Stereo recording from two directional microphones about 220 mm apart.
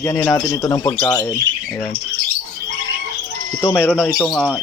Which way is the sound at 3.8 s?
5° right (ahead or behind).